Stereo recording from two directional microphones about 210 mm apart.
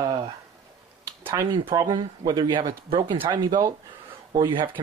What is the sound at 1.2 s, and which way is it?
Speech, 20° right (ahead or behind).